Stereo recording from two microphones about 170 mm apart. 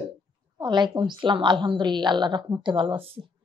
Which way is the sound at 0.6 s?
25° right (ahead or behind).